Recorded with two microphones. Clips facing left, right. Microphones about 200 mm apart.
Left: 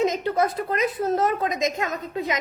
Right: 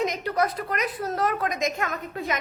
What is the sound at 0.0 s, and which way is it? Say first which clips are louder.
A woman's voice: left 3 dB; 25° left (ahead or behind).